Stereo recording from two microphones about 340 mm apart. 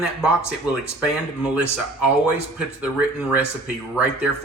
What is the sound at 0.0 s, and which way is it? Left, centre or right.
Speech, centre.